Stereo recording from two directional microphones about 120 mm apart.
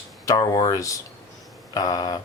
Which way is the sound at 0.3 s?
30° left (ahead or behind).